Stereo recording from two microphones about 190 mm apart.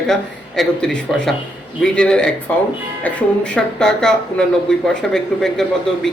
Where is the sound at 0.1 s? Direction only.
Centre (ahead or behind).